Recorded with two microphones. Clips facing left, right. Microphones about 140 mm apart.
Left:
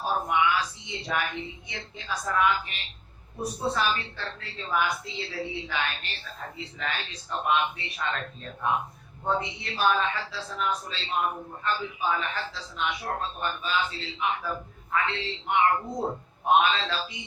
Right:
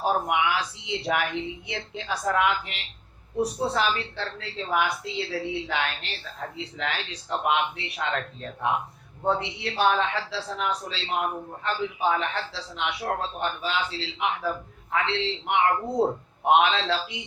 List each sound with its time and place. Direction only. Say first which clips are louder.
0.0 s a woman's voice: right 2 dB; 85° right
3.8 s a woman's voice: right 2 dB; 90° right